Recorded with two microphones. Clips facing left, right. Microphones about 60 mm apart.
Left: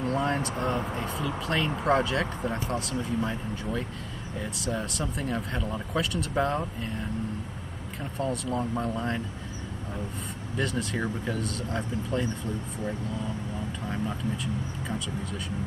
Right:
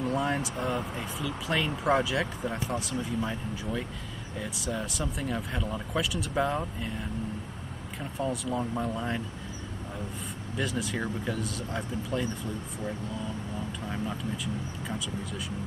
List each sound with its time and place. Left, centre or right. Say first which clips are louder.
0.0 s speech: left 1 dB; centre
8.0 s speech: left 1 dB; centre
10.6 s speech: left 2 dB; centre
13.8 s speech: left 3 dB; centre